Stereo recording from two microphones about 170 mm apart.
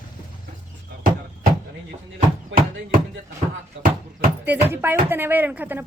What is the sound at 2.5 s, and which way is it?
Speech, 55° right (ahead or behind).